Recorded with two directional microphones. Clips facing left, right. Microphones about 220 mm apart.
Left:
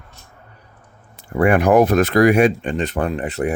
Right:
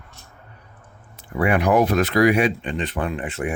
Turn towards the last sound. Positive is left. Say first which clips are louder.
# left 5 dB
turn(degrees=40)  # may be behind; listen again after turning